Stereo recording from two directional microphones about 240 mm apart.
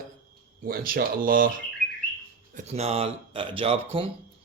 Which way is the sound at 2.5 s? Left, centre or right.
Right.